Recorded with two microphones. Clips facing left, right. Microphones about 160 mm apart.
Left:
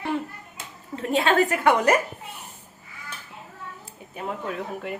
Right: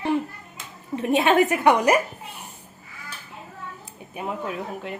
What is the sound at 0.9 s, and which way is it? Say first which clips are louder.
A woman's voice: right 2 dB; 20° right (ahead or behind).